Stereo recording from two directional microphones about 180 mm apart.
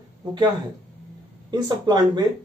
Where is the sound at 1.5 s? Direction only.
25° right (ahead or behind).